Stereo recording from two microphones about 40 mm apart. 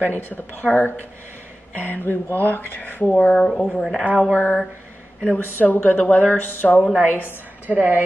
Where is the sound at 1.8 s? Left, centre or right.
Left.